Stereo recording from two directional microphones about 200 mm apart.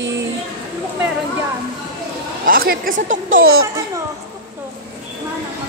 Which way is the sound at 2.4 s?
45° right (ahead or behind).